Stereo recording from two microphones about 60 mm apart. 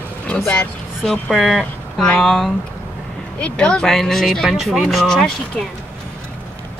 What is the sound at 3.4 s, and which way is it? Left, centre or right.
Speech, centre.